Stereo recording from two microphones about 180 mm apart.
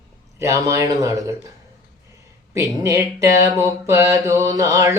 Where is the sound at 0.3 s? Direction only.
15° right (ahead or behind).